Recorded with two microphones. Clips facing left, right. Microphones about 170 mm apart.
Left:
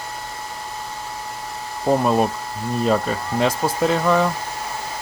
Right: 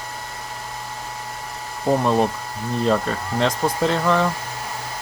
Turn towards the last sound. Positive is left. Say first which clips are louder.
# left 1 dB
turn(degrees=5)  # may be behind; listen again after turning